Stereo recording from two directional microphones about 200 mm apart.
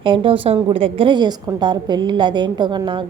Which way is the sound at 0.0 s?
25° right (ahead or behind).